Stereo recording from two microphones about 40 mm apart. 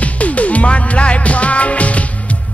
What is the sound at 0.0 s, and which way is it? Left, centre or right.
Music, left.